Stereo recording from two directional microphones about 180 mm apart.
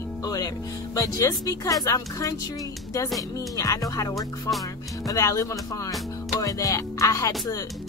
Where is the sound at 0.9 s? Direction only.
20° left (ahead or behind).